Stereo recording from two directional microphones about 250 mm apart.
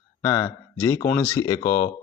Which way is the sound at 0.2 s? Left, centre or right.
Centre.